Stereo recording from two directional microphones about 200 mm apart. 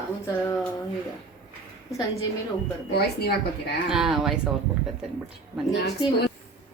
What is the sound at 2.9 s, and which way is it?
Speech, 55° left (ahead or behind).